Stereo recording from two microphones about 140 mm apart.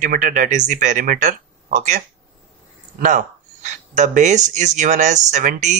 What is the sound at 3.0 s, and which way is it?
Speech, 65° right (ahead or behind).